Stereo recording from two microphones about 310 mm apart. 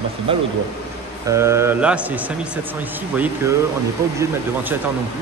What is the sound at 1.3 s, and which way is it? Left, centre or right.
Speech, centre.